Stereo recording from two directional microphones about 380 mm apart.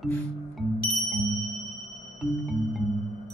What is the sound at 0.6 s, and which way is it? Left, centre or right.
Music, centre.